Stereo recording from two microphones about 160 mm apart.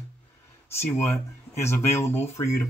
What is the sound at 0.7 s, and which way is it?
Speech, 15° left (ahead or behind).